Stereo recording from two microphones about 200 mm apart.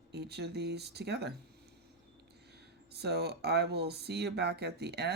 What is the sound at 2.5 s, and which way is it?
Speech, 55° right (ahead or behind).